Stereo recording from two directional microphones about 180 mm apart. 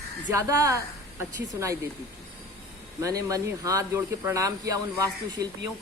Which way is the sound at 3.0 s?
20° right (ahead or behind).